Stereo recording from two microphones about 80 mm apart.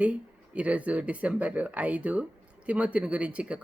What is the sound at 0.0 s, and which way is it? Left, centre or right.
Speech, centre.